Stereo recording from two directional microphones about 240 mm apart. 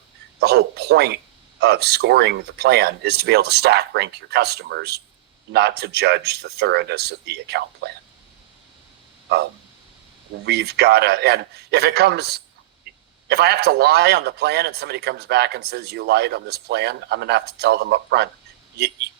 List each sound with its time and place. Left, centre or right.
0.3 s speech: right
10.4 s speech: right